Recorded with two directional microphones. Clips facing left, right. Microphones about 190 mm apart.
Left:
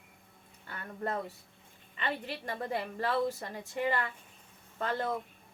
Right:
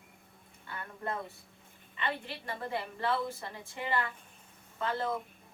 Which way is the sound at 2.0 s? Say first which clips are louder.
Left 1 dB; 45° left (ahead or behind).